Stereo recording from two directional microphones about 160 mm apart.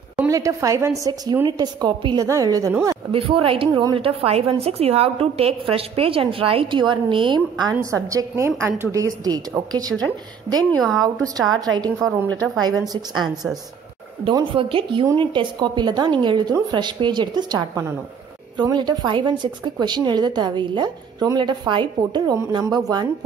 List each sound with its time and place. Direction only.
0.3 s a woman's voice: 20° right (ahead or behind)
3.1 s a woman's voice: 35° right (ahead or behind)
10.7 s speech: centre (ahead or behind)
11.2 s a woman's voice: 25° right (ahead or behind)